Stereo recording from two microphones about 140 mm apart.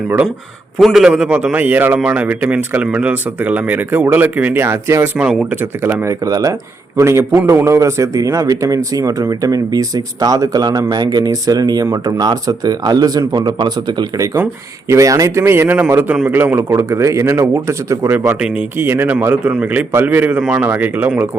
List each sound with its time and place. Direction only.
0.8 s speech: centre (ahead or behind); by 5.0 s 20° right (ahead or behind)
5.1 s speech: 5° right (ahead or behind)
18.3 s speech: 5° right (ahead or behind)
18.8 s speech: 15° right (ahead or behind)